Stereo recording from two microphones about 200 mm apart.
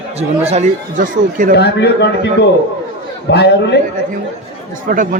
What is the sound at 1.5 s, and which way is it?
Speech, 60° left (ahead or behind).